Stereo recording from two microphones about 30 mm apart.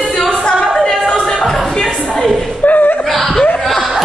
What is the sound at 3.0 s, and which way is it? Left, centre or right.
Laughter, centre.